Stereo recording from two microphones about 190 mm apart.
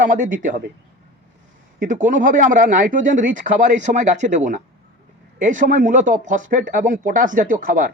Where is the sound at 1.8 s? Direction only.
45° right (ahead or behind).